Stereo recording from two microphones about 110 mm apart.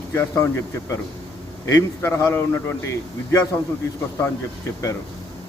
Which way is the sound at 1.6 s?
25° left (ahead or behind).